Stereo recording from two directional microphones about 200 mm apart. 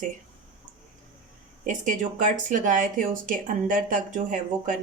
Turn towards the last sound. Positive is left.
turn(degrees=-40)  # may be behind; listen again after turning